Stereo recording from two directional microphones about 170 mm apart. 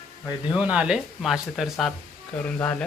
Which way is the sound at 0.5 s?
5° right (ahead or behind).